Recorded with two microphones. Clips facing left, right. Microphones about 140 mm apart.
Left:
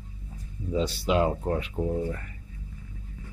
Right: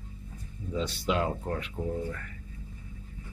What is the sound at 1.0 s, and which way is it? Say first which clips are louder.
Speech: left 4 dB; 25° left (ahead or behind).